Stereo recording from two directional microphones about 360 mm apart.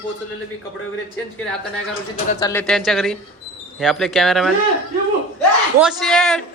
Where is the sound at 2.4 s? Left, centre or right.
Centre.